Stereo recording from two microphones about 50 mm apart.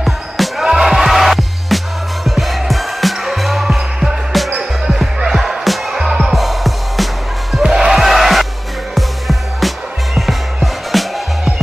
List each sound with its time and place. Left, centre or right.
0.0 s music: centre
7.6 s music: centre